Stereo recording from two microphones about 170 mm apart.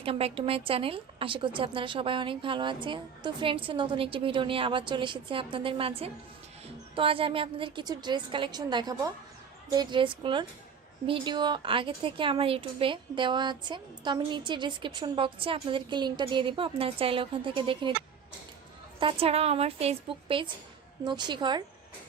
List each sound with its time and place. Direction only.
0.0 s a woman's voice: 35° right (ahead or behind)
18.9 s a woman's voice: 30° right (ahead or behind)